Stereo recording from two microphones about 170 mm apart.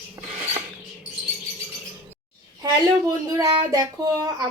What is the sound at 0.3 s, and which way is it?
Rodents, 35° right (ahead or behind).